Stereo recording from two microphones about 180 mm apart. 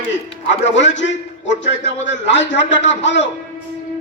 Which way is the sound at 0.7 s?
90° left.